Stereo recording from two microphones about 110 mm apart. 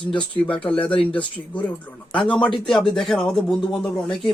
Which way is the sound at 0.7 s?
50° left (ahead or behind).